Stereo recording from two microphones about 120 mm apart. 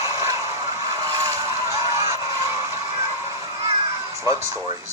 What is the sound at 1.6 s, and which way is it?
Honk, 25° right (ahead or behind).